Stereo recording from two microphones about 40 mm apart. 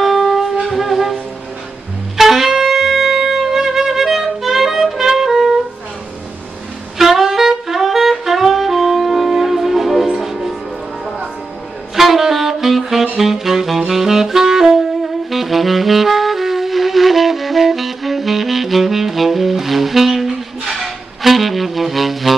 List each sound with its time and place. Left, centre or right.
0.0 s wind instrument: centre
2.1 s wind instrument: centre
7.0 s saxophone: centre
11.9 s saxophone: centre
20.7 s music: centre